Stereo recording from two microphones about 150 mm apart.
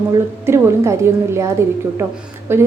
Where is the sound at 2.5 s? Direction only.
15° right (ahead or behind).